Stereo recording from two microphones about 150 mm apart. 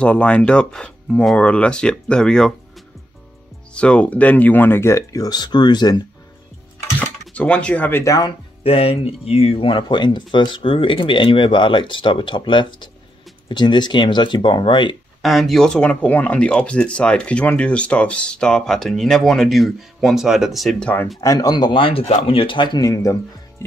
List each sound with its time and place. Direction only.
0.0 s speech: 10° left (ahead or behind)
3.7 s speech: 5° left (ahead or behind); by 6.0 s 30° left (ahead or behind)
6.8 s speech: 10° left (ahead or behind)
8.6 s speech: 40° left (ahead or behind)
15.2 s speech: centre (ahead or behind)
21.2 s speech: 25° left (ahead or behind)